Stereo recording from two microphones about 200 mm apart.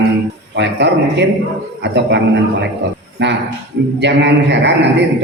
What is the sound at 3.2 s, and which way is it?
A man's voice, 60° right (ahead or behind).